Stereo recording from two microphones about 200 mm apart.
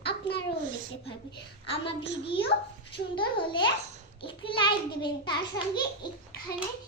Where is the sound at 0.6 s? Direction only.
45° right (ahead or behind).